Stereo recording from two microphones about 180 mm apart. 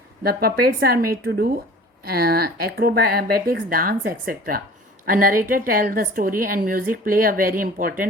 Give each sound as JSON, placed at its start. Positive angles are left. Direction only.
{"t": 0.2, "sound": "a woman's voice", "side_deg": -60}